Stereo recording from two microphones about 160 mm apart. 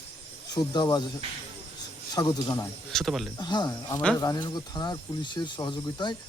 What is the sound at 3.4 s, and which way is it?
Speech, 25° left (ahead or behind).